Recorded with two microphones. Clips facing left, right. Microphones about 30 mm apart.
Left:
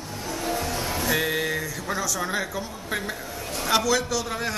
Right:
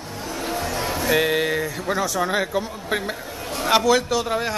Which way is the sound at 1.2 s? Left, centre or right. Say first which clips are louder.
Right 5 dB; right.